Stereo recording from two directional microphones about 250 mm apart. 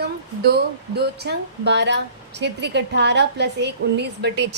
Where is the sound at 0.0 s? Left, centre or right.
Right.